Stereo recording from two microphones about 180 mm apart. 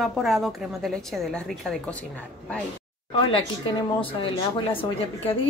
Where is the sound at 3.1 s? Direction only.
30° left (ahead or behind).